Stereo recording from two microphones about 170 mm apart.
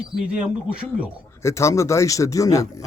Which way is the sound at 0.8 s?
5° right (ahead or behind).